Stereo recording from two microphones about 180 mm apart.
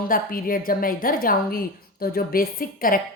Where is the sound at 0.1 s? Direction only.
50° left (ahead or behind).